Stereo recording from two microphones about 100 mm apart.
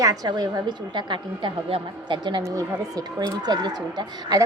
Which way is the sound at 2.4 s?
35° right (ahead or behind).